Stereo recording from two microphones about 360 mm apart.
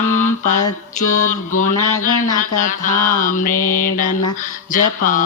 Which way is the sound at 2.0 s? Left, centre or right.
Left.